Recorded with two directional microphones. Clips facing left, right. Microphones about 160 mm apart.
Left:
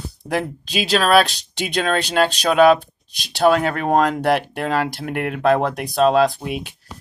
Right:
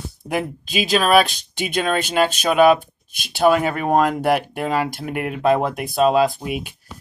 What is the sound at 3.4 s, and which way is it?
Speech, 5° right (ahead or behind).